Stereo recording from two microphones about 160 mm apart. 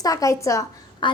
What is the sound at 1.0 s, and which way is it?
Speech, 30° left (ahead or behind).